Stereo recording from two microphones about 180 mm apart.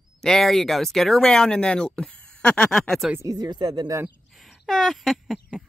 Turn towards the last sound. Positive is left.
turn(degrees=0)  # may be behind; listen again after turning